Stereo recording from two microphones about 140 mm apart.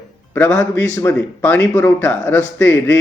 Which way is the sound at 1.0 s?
15° left (ahead or behind).